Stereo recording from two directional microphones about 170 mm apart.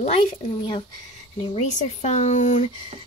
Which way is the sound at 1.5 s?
40° left (ahead or behind).